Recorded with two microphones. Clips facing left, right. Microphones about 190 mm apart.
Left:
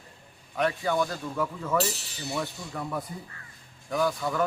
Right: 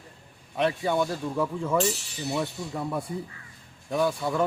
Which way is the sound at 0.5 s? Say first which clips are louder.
Right 1 dB; 25° right (ahead or behind).